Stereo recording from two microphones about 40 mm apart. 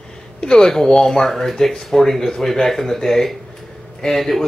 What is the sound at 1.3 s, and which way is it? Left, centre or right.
Speech, centre.